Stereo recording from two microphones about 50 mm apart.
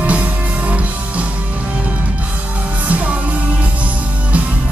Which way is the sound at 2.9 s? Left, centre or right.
Right.